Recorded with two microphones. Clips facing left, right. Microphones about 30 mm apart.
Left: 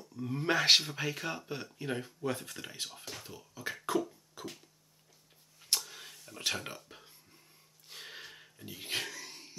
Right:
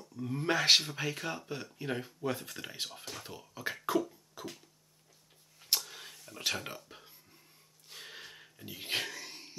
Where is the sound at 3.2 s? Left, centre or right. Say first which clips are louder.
Right 2 dB; right.